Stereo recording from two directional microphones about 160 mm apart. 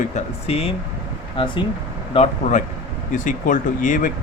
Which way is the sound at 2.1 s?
45° left (ahead or behind).